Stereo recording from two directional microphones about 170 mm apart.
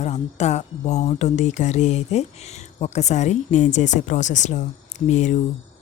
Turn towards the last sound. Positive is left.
turn(degrees=45)  # may be behind; listen again after turning